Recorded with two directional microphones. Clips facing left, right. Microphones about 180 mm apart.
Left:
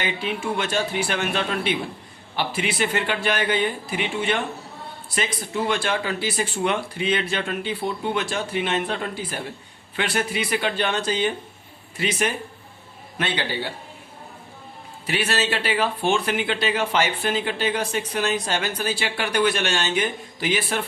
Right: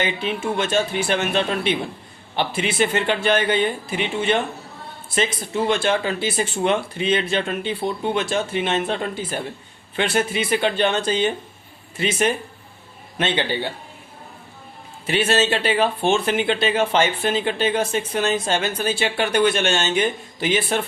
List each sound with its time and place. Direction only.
0.0 s a man's voice: 25° right (ahead or behind)
15.0 s speech: 25° right (ahead or behind)